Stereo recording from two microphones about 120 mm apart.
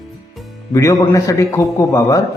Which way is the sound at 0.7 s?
25° left (ahead or behind).